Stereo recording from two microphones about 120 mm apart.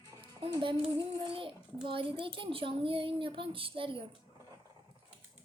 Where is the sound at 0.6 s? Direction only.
45° right (ahead or behind).